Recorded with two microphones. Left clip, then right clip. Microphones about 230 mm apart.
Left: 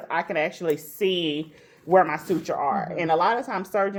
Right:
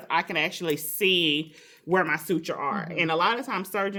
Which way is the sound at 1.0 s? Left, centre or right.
Right.